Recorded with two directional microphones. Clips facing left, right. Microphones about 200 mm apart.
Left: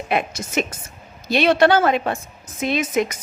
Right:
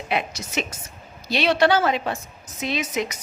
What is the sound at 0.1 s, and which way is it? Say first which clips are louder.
A woman's voice: left 4 dB; 50° left (ahead or behind).